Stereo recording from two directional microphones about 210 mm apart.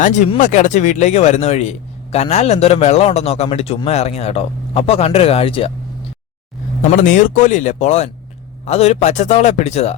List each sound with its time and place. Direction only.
0.0 s a man's voice: 35° left (ahead or behind)
6.9 s speech: 40° left (ahead or behind)